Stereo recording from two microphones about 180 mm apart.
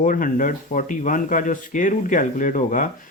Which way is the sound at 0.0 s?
50° left (ahead or behind).